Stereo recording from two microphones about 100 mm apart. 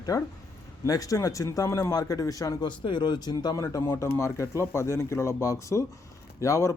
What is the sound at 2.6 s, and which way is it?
A man's voice, 50° left (ahead or behind).